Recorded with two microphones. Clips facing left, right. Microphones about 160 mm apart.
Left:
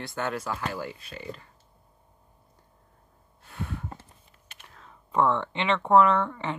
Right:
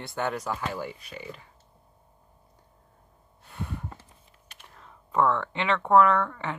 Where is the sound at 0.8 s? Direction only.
10° right (ahead or behind).